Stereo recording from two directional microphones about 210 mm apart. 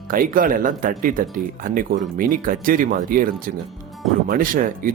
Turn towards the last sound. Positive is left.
turn(degrees=-40)  # may be behind; listen again after turning